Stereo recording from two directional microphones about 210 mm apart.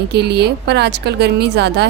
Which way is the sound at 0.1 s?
50° right (ahead or behind).